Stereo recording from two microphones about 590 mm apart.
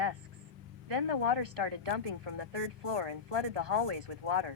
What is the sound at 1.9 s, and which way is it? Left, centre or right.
Speech, right.